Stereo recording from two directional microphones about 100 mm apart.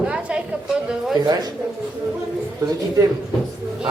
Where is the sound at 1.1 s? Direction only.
40° right (ahead or behind).